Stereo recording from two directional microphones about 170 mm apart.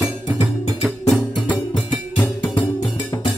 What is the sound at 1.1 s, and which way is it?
Music, 5° left (ahead or behind).